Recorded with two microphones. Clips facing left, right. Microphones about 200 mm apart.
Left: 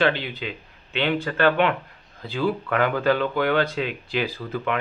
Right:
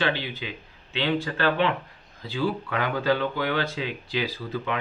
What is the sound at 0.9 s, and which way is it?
Speech, 55° left (ahead or behind).